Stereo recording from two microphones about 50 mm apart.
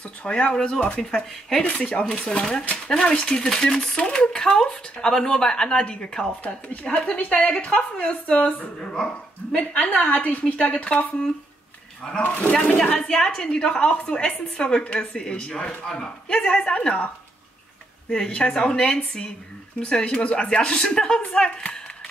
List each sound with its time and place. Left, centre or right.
0.2 s a woman's voice: left
6.4 s a woman's voice: left
13.1 s a woman's voice: centre
18.3 s a woman's voice: centre